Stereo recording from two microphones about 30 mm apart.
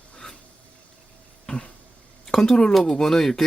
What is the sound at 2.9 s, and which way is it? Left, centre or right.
Speech, centre.